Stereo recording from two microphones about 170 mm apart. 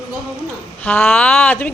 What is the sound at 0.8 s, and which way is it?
Speech, 10° left (ahead or behind).